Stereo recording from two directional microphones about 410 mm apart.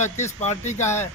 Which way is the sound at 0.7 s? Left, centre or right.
Centre.